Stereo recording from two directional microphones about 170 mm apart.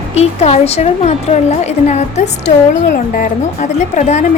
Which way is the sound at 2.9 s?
50° left (ahead or behind).